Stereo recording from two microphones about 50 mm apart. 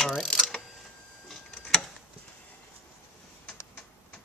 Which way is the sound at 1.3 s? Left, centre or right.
Centre.